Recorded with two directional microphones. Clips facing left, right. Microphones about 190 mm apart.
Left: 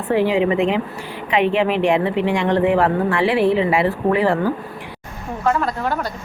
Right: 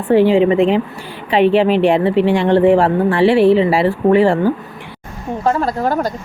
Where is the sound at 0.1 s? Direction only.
30° right (ahead or behind).